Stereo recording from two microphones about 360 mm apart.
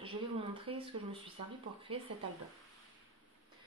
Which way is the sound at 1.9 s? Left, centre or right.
Centre.